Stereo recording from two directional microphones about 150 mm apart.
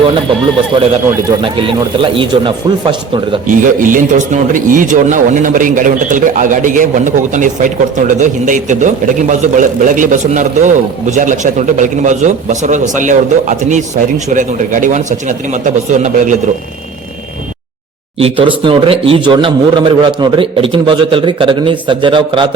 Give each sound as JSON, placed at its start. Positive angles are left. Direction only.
{"t": 1.5, "sound": "speech", "side_deg": -35}
{"t": 3.6, "sound": "a man's voice", "side_deg": -60}
{"t": 18.2, "sound": "speech", "side_deg": -40}